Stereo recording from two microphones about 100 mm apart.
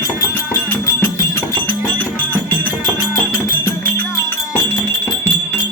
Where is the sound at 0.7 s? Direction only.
25° left (ahead or behind).